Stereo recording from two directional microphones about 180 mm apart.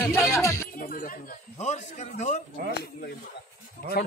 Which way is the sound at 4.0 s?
60° left (ahead or behind).